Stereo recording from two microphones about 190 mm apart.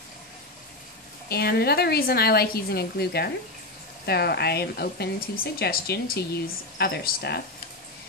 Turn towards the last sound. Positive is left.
turn(degrees=55)  # may be behind; listen again after turning